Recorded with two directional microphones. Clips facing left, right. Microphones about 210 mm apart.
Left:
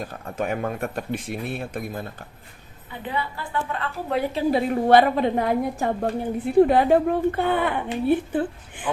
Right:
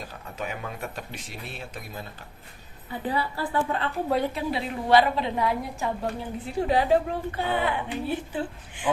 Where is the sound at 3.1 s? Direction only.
35° right (ahead or behind).